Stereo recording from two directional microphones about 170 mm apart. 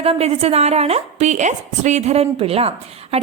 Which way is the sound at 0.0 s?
35° right (ahead or behind).